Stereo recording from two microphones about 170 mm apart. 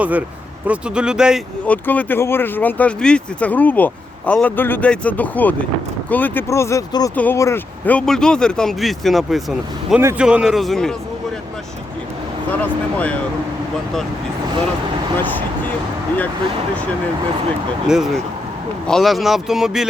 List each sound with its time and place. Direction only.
0.0 s speech: 10° right (ahead or behind)
1.6 s speech: 10° left (ahead or behind)
10.0 s speech: 10° right (ahead or behind)
12.5 s speech: 10° left (ahead or behind)
15.2 s speech: 10° left (ahead or behind)
17.8 s speech: 5° right (ahead or behind)